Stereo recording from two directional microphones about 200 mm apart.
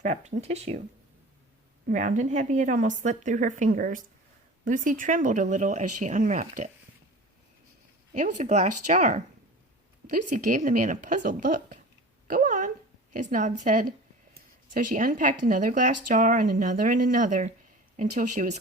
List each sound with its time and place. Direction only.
0.0 s speech: 35° right (ahead or behind)
1.9 s speech: 40° right (ahead or behind)
8.1 s speech: 40° right (ahead or behind)
12.3 s a sound: 40° right (ahead or behind)
13.1 s speech: 40° right (ahead or behind)